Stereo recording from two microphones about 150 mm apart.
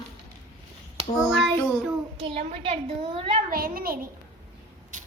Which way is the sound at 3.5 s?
80° right.